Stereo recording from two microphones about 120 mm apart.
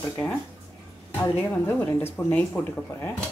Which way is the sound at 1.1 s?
20° left (ahead or behind).